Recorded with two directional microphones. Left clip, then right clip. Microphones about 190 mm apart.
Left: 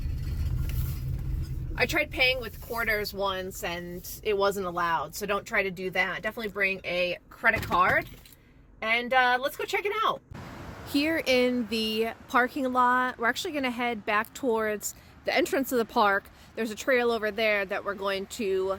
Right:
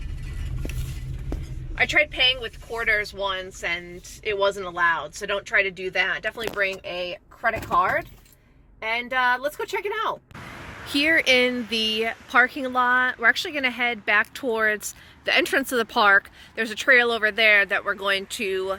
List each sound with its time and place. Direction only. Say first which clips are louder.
1.7 s a woman's voice: right 6 dB; 20° left (ahead or behind)